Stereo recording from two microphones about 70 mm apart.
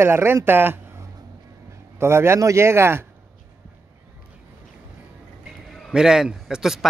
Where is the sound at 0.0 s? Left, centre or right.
Right.